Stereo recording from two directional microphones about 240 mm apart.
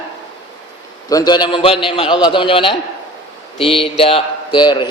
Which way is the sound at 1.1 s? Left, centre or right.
Centre.